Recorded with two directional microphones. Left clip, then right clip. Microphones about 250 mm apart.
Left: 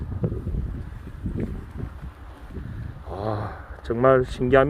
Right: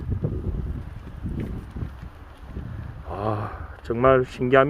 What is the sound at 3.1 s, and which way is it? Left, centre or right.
Speech, centre.